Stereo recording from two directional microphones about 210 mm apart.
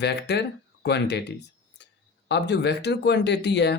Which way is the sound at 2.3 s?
55° left (ahead or behind).